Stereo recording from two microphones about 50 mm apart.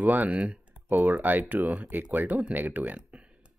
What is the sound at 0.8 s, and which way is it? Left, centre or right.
Speech, right.